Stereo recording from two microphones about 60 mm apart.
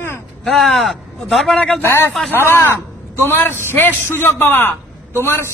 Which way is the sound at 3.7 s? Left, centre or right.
Left.